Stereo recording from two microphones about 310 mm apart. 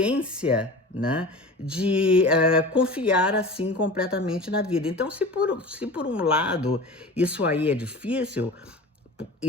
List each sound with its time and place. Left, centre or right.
0.0 s speech: centre